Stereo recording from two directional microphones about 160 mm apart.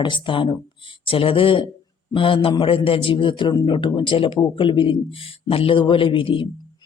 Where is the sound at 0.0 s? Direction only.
30° left (ahead or behind).